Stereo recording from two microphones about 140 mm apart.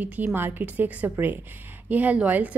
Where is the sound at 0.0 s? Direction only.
10° right (ahead or behind).